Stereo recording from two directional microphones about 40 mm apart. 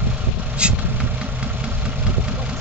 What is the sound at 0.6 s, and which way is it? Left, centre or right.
Vehicle, right.